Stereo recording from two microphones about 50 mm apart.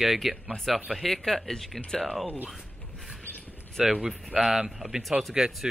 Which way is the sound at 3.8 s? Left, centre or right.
Centre.